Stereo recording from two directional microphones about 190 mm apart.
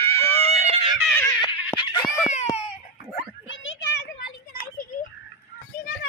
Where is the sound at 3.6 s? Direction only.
85° left.